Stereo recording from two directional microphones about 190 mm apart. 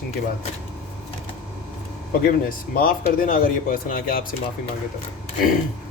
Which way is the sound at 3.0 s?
45° left (ahead or behind).